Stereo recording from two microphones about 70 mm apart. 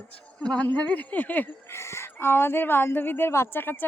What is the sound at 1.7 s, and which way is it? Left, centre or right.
Speech, left.